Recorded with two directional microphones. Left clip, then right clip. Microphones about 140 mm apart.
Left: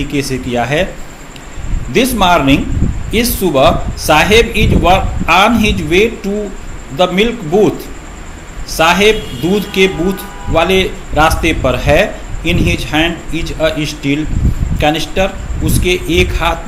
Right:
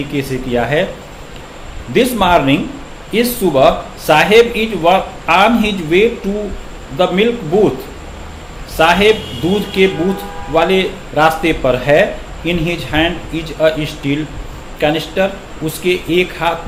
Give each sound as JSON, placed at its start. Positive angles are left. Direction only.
{"t": 0.1, "sound": "a man's voice", "side_deg": 40}
{"t": 1.9, "sound": "a man's voice", "side_deg": 35}
{"t": 8.7, "sound": "a man's voice", "side_deg": 40}